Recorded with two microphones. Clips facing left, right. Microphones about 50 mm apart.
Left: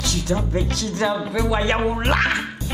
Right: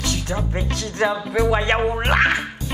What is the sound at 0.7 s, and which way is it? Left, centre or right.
Speech, right.